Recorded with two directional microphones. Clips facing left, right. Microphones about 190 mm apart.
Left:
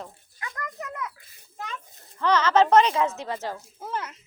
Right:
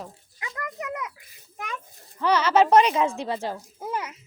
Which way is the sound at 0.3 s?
20° right (ahead or behind).